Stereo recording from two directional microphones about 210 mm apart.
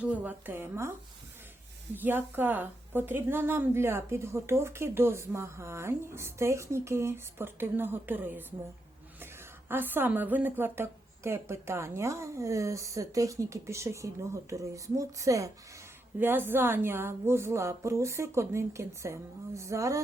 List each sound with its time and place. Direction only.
0.0 s a woman's voice: 5° right (ahead or behind)
2.0 s a woman's voice: 10° right (ahead or behind)